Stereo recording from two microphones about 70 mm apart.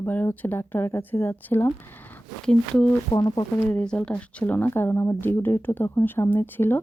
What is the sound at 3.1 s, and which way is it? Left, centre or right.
Speech, left.